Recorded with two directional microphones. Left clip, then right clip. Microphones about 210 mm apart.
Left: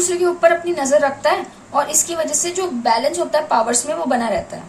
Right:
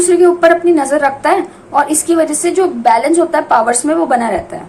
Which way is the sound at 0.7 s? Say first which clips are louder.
Right 3 dB; 25° right (ahead or behind).